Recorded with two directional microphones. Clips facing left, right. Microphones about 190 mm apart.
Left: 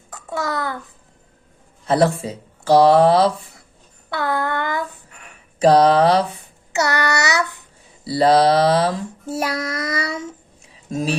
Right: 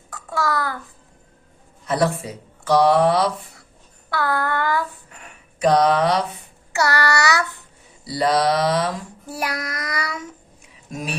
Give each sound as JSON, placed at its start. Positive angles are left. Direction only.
{"t": 0.1, "sound": "a child's voice", "side_deg": 20}
{"t": 1.9, "sound": "speech", "side_deg": 30}
{"t": 5.5, "sound": "mantra", "side_deg": 30}
{"t": 6.7, "sound": "speech", "side_deg": 20}
{"t": 8.0, "sound": "child singing", "side_deg": 30}